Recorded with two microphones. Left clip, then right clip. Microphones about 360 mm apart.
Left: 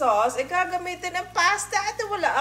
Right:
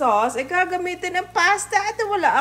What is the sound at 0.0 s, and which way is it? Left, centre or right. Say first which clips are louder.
A woman's voice: right 2 dB; right.